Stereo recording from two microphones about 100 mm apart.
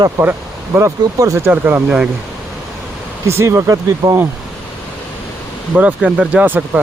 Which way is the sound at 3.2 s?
25° right (ahead or behind).